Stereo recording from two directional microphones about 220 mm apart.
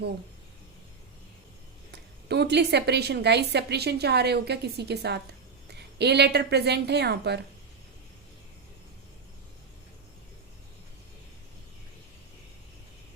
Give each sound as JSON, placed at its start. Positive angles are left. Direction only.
{"t": 1.9, "sound": "speech", "side_deg": -50}